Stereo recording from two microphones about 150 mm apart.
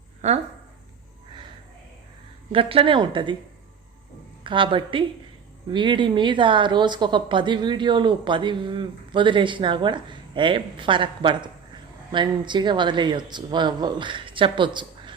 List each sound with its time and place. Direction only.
2.5 s a woman's voice: 35° right (ahead or behind)
4.4 s a woman's voice: 35° right (ahead or behind)